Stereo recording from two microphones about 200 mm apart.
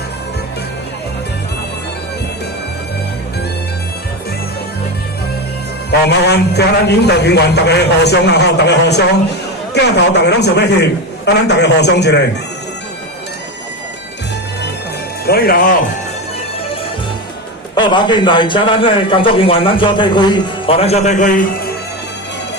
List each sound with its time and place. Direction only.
5.9 s a man's voice: 55° left (ahead or behind)
15.3 s speech: 50° left (ahead or behind)
17.7 s speech: 20° left (ahead or behind); by 21.7 s 40° left (ahead or behind)